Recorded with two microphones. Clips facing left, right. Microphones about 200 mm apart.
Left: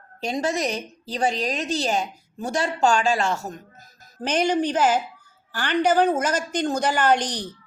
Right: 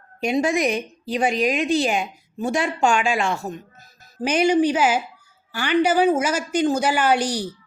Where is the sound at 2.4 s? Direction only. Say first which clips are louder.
Right 1 dB; 40° left (ahead or behind).